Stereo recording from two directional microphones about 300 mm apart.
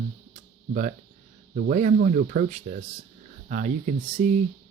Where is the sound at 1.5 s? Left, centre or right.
Right.